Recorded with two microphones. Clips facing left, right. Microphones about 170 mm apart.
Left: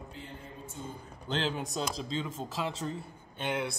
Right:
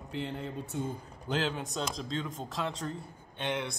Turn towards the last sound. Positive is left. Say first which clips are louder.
# left 1 dB
turn(degrees=5)  # may be behind; listen again after turning